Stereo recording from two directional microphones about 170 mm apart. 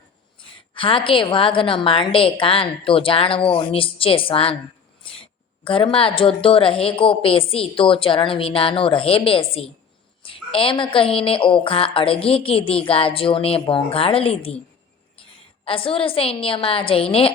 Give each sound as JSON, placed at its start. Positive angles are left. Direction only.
{"t": 0.7, "sound": "a woman's voice", "side_deg": 30}
{"t": 15.6, "sound": "a woman's voice", "side_deg": 30}